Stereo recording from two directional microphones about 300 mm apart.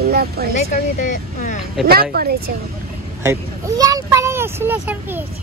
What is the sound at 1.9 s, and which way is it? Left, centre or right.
Speech, right.